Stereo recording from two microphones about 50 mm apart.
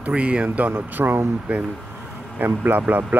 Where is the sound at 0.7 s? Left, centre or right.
Right.